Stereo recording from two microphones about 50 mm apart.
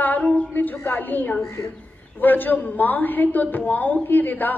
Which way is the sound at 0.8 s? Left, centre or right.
Left.